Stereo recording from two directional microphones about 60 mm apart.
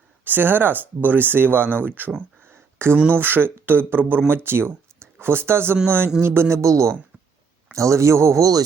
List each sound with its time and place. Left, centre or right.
0.3 s speech: right
2.4 s a sound: right
3.1 s a man's voice: right